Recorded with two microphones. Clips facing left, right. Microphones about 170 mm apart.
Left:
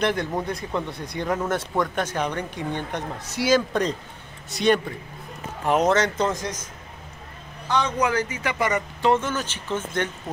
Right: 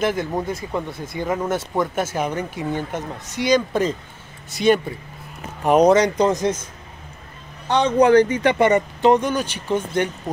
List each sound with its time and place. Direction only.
0.0 s speech: centre (ahead or behind)
5.6 s speech: 20° right (ahead or behind)
7.6 s speech: 30° right (ahead or behind)
9.1 s speech: 15° right (ahead or behind)